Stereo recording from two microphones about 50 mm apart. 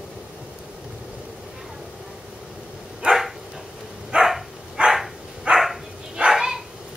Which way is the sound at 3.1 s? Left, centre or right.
Centre.